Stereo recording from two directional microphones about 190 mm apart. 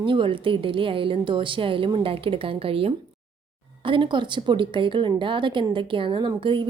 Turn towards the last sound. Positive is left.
turn(degrees=-25)  # may be behind; listen again after turning